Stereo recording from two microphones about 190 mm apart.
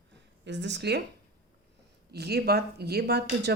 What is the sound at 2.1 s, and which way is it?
Speech, 60° right (ahead or behind).